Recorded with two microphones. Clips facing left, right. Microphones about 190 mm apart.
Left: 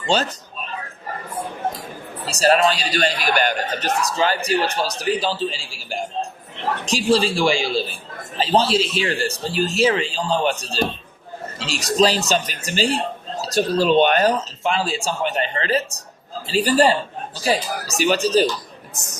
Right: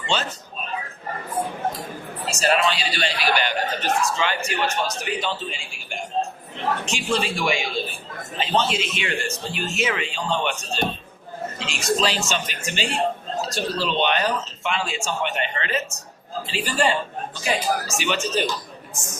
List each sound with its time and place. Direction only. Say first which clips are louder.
0.0 s speech: left 5 dB; 40° left (ahead or behind)
2.2 s speech: left 5 dB; 35° left (ahead or behind)